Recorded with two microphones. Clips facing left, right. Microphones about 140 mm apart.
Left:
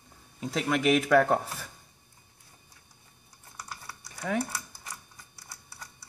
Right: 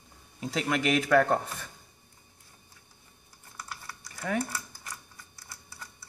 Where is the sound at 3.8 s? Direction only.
15° left (ahead or behind).